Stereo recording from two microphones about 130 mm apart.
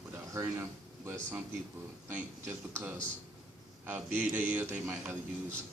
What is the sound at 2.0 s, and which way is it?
Speech, 15° right (ahead or behind).